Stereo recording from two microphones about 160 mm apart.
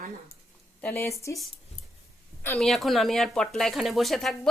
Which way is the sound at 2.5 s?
Centre (ahead or behind).